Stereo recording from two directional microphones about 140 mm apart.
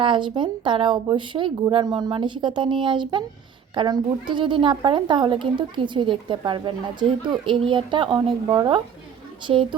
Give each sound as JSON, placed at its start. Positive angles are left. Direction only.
{"t": 0.0, "sound": "speech", "side_deg": -35}